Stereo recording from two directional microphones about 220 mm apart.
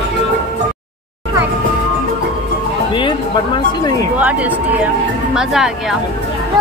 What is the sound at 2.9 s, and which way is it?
Speech, 20° left (ahead or behind).